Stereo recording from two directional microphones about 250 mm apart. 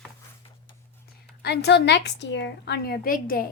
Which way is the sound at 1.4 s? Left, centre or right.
Left.